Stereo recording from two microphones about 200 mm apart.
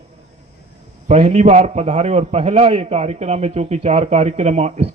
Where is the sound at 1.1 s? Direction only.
35° right (ahead or behind).